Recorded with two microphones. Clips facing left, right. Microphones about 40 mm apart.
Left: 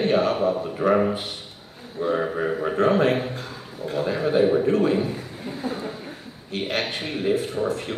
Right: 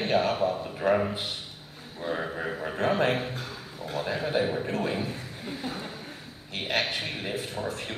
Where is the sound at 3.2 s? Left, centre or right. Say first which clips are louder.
Left 4 dB; centre.